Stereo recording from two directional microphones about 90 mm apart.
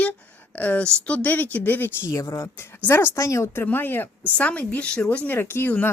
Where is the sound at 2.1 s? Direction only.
35° left (ahead or behind).